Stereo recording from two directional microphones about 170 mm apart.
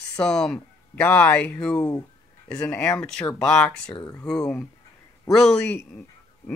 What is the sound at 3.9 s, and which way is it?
Speech, 25° left (ahead or behind).